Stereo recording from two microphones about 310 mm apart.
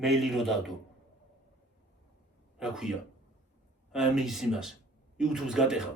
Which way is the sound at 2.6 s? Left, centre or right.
Centre.